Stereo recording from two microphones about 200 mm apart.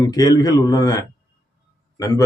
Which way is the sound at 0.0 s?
20° left (ahead or behind).